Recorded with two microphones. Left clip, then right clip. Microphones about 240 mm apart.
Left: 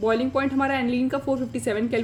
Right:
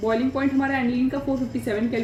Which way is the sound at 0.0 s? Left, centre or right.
Left.